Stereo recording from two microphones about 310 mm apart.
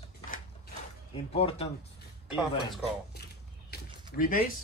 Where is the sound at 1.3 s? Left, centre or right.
Centre.